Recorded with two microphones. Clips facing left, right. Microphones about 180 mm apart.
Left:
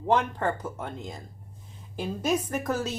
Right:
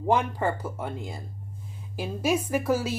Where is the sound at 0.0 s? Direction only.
10° right (ahead or behind).